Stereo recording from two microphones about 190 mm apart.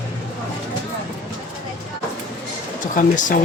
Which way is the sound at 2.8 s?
45° left (ahead or behind).